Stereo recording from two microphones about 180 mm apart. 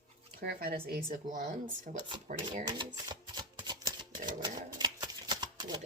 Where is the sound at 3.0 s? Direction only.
25° right (ahead or behind).